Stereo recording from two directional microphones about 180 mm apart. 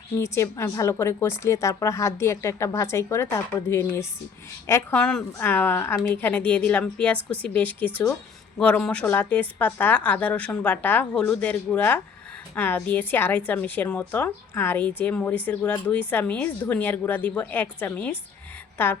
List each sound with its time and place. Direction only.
0.2 s speech: 15° left (ahead or behind)